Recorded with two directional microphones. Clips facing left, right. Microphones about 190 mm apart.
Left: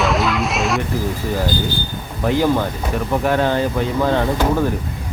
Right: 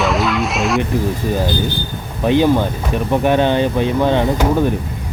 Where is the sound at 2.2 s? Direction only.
20° right (ahead or behind).